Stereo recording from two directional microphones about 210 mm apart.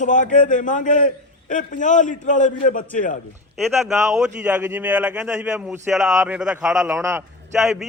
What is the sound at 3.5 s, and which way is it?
A man's voice, centre (ahead or behind).